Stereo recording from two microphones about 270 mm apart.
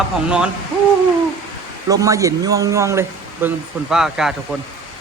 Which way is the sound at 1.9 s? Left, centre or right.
Centre.